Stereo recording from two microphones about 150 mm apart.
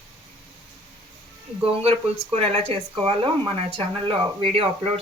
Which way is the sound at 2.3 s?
40° right (ahead or behind).